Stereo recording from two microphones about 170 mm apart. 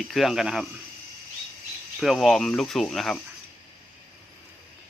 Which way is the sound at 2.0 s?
Centre (ahead or behind).